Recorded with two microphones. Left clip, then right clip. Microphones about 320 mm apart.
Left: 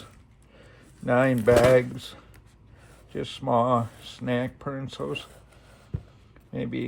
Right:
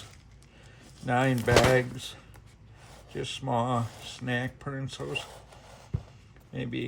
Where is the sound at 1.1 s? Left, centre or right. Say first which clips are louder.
Left 5 dB; centre.